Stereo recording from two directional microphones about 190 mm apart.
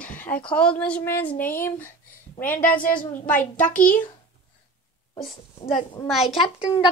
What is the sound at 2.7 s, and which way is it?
A woman's voice, 45° left (ahead or behind).